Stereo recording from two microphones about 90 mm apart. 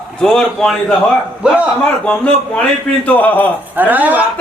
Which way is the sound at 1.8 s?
10° left (ahead or behind).